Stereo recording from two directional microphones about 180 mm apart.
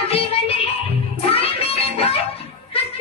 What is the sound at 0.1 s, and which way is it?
Music, 35° left (ahead or behind).